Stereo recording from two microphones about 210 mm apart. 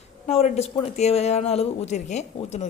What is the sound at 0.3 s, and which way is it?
Speech, 30° left (ahead or behind).